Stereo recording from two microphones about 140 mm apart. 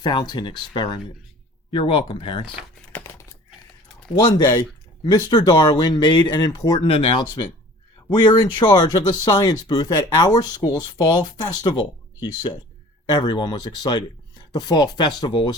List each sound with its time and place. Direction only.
0.0 s speech: 30° left (ahead or behind)
4.1 s speech: 30° left (ahead or behind)
6.8 s speech: 40° left (ahead or behind)